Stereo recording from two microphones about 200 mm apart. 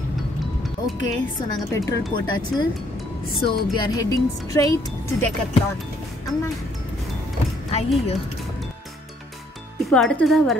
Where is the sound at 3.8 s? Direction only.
15° left (ahead or behind).